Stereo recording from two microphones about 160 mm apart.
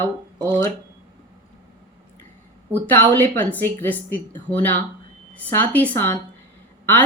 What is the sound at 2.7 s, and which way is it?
A woman's voice, 10° left (ahead or behind).